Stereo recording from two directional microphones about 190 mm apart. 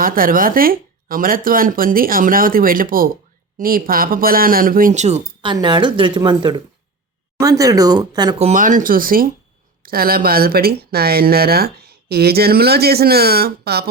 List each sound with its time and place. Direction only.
0.0 s speech: 50° right (ahead or behind); by 8.4 s 20° right (ahead or behind)
8.4 s speech: 40° right (ahead or behind); by 13.9 s 55° right (ahead or behind)